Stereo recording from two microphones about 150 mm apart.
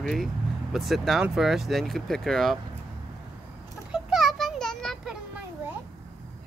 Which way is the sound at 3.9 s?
Centre (ahead or behind).